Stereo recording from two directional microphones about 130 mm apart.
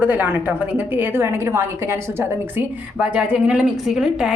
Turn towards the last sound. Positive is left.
turn(degrees=-5)  # may be behind; listen again after turning